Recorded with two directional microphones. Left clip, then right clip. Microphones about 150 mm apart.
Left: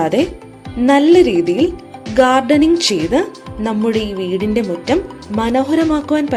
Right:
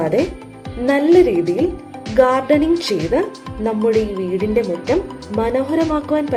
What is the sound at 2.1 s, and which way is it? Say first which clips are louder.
Speech: left 2 dB; 55° left (ahead or behind).